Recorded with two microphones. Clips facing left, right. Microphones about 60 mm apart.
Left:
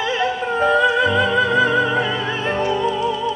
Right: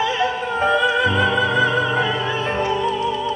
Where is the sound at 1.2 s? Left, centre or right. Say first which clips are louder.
Left 1 dB; right.